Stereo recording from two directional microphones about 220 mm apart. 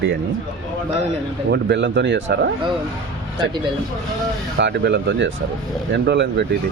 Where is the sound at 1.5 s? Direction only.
55° right (ahead or behind).